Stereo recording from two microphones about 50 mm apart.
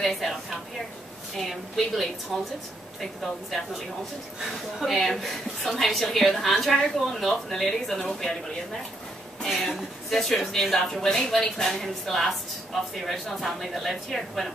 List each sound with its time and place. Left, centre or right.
0.0 s a woman's voice: centre
4.4 s speech: centre
4.9 s a woman's voice: centre
9.6 s a woman's voice: centre